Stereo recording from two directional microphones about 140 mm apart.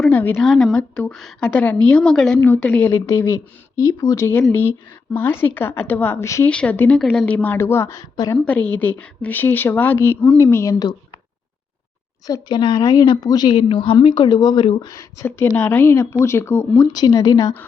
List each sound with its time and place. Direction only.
0.0 s a woman's voice: 10° left (ahead or behind)
6.5 s a woman's voice: 10° left (ahead or behind)
8.1 s a woman's voice: 30° left (ahead or behind)
8.4 s a woman's voice: 10° left (ahead or behind); by 10.9 s 25° left (ahead or behind)
12.3 s a woman's voice: 30° left (ahead or behind)